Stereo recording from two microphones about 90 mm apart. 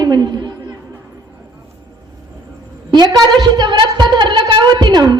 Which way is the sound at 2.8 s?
50° right (ahead or behind).